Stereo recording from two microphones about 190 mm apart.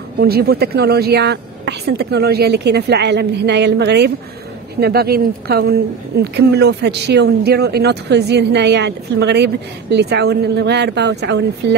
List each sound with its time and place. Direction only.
0.2 s a woman's voice: 55° right (ahead or behind)